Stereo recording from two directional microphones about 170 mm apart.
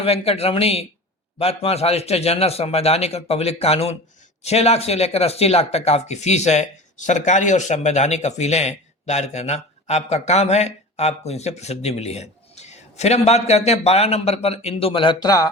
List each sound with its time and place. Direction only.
0.0 s speech: 35° left (ahead or behind)